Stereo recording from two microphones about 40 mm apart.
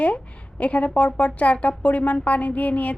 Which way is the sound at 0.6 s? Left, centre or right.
Left.